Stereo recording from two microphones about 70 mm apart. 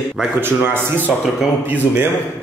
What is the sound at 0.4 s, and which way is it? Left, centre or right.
Speech, right.